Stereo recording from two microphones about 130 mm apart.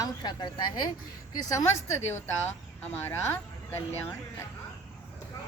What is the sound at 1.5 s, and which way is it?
Speech, 20° left (ahead or behind).